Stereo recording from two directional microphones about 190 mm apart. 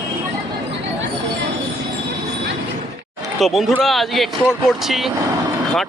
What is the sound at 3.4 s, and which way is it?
Speech, centre (ahead or behind).